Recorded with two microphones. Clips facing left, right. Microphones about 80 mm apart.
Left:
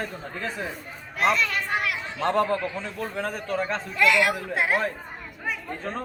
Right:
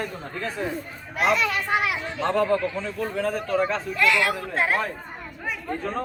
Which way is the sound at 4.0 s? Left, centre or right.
Left.